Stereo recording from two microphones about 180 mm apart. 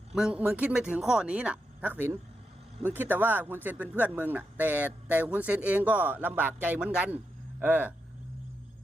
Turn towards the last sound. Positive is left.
turn(degrees=-10)  # may be behind; listen again after turning